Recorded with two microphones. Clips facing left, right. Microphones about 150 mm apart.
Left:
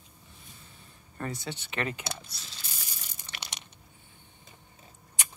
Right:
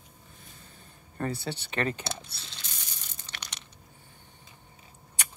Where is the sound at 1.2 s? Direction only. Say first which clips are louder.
Right 4 dB; 35° right (ahead or behind).